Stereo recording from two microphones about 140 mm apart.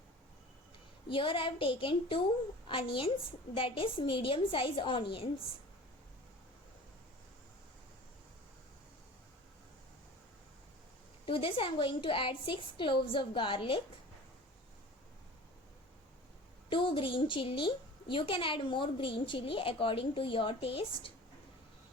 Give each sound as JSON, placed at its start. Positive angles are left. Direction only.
{"t": 1.1, "sound": "speech", "side_deg": 40}
{"t": 11.3, "sound": "speech", "side_deg": 40}
{"t": 16.6, "sound": "speech", "side_deg": 35}